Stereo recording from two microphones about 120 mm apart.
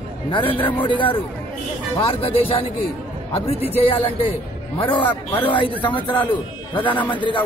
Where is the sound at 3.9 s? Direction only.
45° left (ahead or behind).